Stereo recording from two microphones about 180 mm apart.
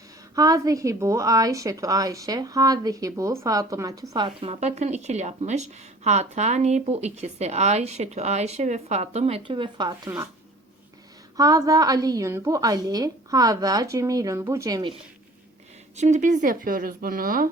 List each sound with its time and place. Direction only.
0.3 s a woman's voice: 20° right (ahead or behind)
4.1 s speech: 30° right (ahead or behind)
11.3 s a woman's voice: 20° right (ahead or behind)
16.0 s speech: 40° right (ahead or behind)